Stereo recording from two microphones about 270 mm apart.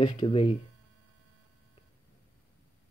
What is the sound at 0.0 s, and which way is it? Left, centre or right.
Speech, centre.